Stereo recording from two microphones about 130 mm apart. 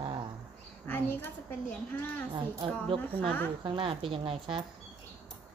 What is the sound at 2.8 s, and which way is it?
A woman's voice, 45° right (ahead or behind).